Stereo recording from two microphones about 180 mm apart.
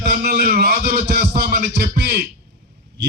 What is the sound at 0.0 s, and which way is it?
Music, 60° right (ahead or behind).